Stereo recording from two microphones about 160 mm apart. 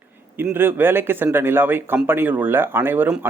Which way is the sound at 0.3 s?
15° right (ahead or behind).